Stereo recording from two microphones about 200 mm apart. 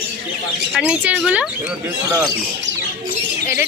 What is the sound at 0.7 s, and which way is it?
Speech, 5° right (ahead or behind).